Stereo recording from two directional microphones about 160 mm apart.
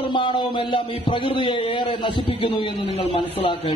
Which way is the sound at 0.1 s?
30° left (ahead or behind).